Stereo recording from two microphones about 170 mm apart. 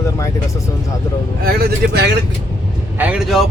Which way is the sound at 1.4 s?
65° right (ahead or behind).